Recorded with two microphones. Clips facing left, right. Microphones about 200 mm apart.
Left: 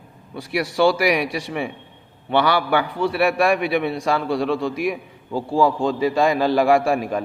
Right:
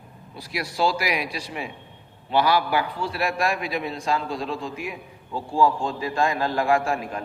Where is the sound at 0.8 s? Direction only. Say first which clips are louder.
Left 6 dB; 70° left (ahead or behind).